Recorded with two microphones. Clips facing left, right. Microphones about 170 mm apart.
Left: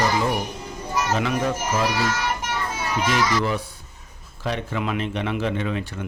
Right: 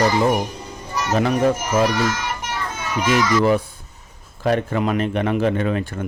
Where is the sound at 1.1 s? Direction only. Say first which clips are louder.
Right 6 dB; 40° right (ahead or behind).